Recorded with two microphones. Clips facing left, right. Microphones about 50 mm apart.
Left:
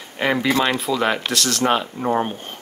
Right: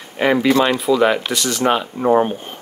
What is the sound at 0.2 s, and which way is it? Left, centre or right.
Speech, centre.